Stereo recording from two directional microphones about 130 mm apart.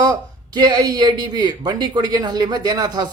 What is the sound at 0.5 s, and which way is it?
Speech, 35° right (ahead or behind).